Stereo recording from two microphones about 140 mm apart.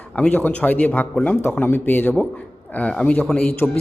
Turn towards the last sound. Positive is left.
turn(degrees=10)  # may be behind; listen again after turning